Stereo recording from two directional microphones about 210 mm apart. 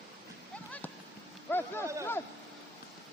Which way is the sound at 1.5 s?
10° left (ahead or behind).